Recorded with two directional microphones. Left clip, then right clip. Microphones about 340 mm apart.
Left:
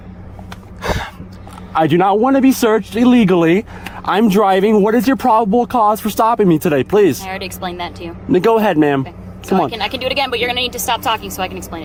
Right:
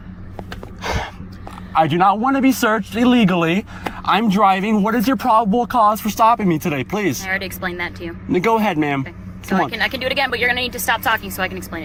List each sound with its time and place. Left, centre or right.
0.8 s gasp: centre
1.7 s speech: left
9.6 s speech: left
10.2 s speech: left